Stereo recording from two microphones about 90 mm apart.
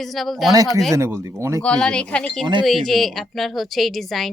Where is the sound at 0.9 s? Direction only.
30° right (ahead or behind).